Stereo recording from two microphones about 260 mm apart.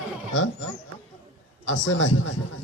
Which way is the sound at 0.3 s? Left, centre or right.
Left.